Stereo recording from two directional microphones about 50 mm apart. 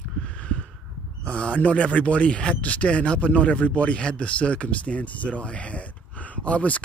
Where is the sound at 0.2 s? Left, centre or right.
Left.